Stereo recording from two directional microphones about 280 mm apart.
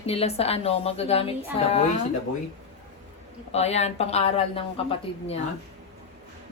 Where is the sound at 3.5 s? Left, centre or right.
Left.